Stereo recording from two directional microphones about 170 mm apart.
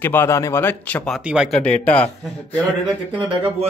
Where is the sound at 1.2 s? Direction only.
5° right (ahead or behind).